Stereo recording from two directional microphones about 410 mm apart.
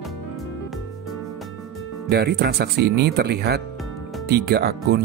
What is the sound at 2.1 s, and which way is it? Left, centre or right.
Speech, right.